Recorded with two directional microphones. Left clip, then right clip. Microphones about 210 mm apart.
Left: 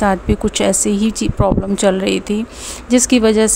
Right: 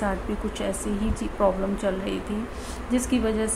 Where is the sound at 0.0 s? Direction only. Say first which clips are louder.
Left 12 dB; 45° left (ahead or behind).